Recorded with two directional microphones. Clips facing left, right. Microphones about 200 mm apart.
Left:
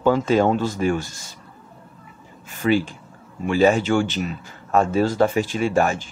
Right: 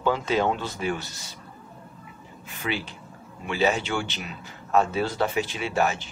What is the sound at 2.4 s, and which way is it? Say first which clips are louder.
Speech: left 11 dB; 45° left (ahead or behind).